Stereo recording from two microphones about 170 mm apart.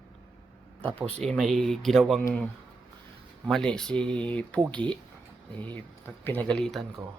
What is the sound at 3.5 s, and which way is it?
Speech, 5° left (ahead or behind).